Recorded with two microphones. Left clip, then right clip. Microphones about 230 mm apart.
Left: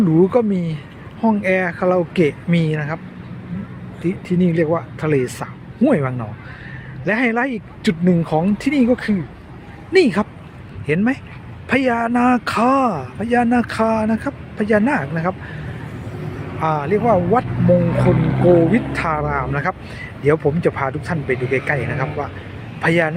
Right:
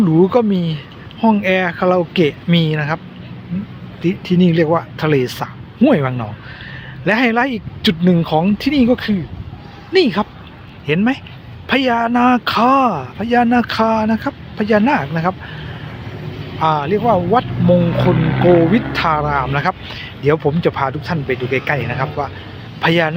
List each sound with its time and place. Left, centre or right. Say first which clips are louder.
0.2 s speech: right 3 dB; centre
4.0 s speech: right 4 dB; centre
16.6 s speech: right 3 dB; centre
17.9 s speech: right 2 dB; centre
18.6 s speech: right 3 dB; centre